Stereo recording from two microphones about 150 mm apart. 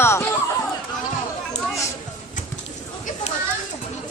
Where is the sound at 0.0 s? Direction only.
15° left (ahead or behind).